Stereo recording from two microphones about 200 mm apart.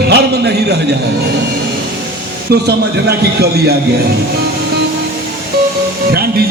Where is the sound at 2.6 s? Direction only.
55° right (ahead or behind).